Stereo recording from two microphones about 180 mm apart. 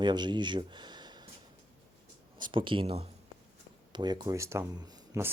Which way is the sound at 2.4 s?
30° right (ahead or behind).